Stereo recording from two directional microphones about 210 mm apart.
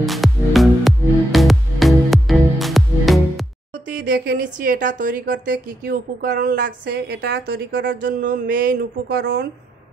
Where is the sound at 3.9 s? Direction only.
45° right (ahead or behind).